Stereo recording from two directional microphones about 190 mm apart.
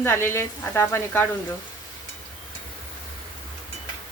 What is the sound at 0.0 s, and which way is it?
Speech, 15° left (ahead or behind).